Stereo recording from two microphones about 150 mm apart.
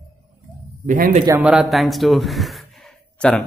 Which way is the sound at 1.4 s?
10° right (ahead or behind).